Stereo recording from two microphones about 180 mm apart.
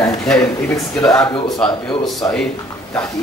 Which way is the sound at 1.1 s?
5° left (ahead or behind).